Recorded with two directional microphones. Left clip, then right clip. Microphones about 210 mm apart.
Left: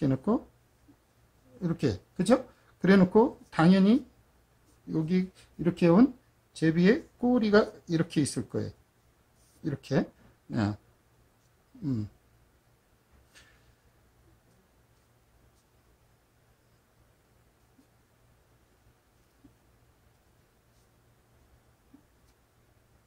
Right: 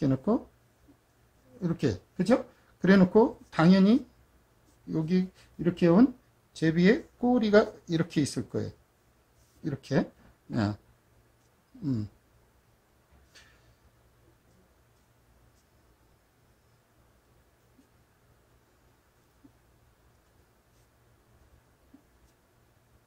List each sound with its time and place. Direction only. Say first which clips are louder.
0.0 s speech: right 1 dB; 10° left (ahead or behind)
1.6 s speech: even; 15° left (ahead or behind)